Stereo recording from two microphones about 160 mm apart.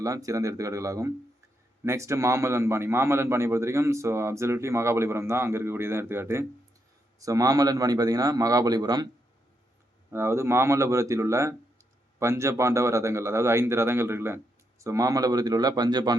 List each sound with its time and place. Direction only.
0.0 s a man's voice: 20° right (ahead or behind)
10.1 s speech: 15° right (ahead or behind)